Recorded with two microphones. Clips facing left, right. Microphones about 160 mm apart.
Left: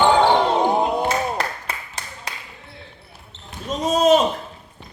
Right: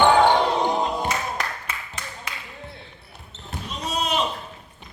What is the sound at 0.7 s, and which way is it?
Music, 55° left (ahead or behind).